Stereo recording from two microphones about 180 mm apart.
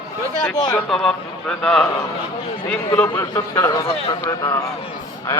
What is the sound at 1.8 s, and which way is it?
A man's voice, 20° left (ahead or behind).